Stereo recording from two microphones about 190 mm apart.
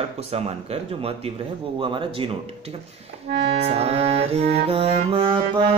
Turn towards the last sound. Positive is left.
turn(degrees=-25)  # may be behind; listen again after turning